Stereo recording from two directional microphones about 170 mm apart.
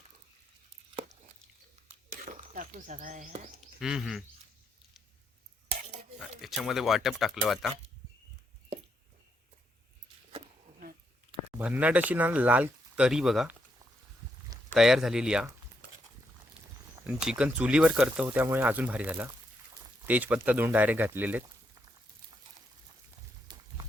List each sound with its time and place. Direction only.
2.2 s speech: 50° right (ahead or behind)
3.8 s speech: 5° right (ahead or behind)
6.4 s speech: centre (ahead or behind)
11.5 s speech: 10° right (ahead or behind)
14.8 s speech: centre (ahead or behind)
17.0 s speech: 5° right (ahead or behind)
23.5 s a sound: 25° right (ahead or behind)